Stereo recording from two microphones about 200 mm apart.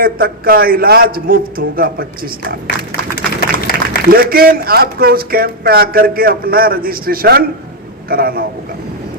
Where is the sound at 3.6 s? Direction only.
50° left (ahead or behind).